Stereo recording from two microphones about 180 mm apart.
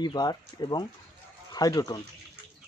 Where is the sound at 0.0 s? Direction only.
25° left (ahead or behind).